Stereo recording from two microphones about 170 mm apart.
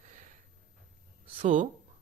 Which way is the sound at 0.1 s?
45° right (ahead or behind).